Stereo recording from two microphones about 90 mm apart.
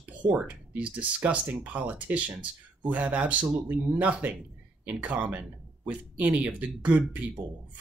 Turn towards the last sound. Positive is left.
turn(degrees=-15)  # may be behind; listen again after turning